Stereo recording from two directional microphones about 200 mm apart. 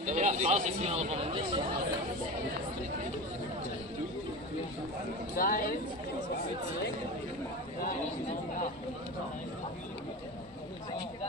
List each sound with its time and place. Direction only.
0.0 s speech: 35° right (ahead or behind)
5.3 s speech: 45° left (ahead or behind)